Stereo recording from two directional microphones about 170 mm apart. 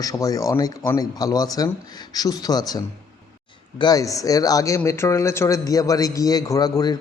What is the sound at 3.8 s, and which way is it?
Speech, 20° left (ahead or behind).